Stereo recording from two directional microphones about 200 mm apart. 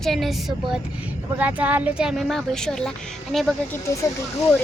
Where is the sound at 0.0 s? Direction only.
Centre (ahead or behind).